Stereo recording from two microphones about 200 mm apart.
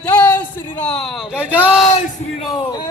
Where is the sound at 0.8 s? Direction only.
5° left (ahead or behind).